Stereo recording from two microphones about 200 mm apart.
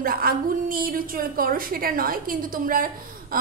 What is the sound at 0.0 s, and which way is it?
A woman's voice, 45° right (ahead or behind).